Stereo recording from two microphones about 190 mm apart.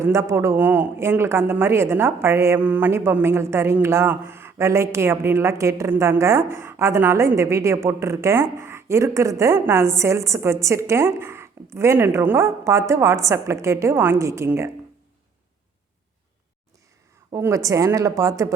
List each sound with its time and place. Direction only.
0.0 s a woman's voice: 15° right (ahead or behind)
17.3 s a woman's voice: 15° right (ahead or behind)